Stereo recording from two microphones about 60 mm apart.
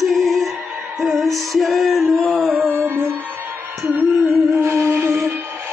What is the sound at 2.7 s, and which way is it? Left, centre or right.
Music, right.